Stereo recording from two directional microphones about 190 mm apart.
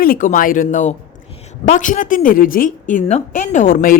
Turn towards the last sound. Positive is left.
turn(degrees=45)  # may be behind; listen again after turning